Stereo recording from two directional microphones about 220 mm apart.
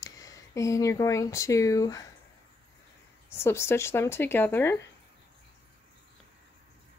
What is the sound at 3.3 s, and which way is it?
Speech, 10° left (ahead or behind).